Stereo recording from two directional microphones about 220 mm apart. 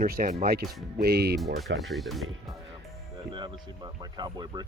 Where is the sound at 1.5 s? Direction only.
Centre (ahead or behind).